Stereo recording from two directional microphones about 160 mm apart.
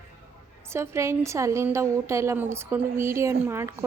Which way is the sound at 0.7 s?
15° right (ahead or behind).